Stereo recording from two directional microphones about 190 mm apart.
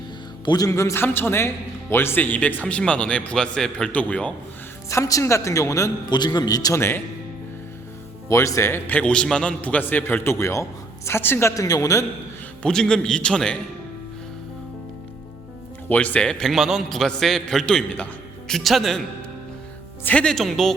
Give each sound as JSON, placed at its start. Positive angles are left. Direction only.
{"t": 0.4, "sound": "a man's voice", "side_deg": 20}
{"t": 8.3, "sound": "a man's voice", "side_deg": 15}
{"t": 12.6, "sound": "a man's voice", "side_deg": 5}
{"t": 15.9, "sound": "a man's voice", "side_deg": 10}
{"t": 20.1, "sound": "a man's voice", "side_deg": 5}